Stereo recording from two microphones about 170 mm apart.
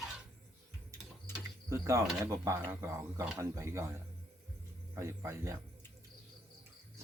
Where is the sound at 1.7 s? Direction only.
15° right (ahead or behind).